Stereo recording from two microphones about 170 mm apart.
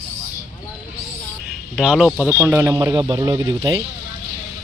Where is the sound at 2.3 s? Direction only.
10° right (ahead or behind).